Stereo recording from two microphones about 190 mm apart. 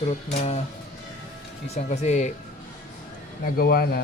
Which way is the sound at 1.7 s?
35° left (ahead or behind).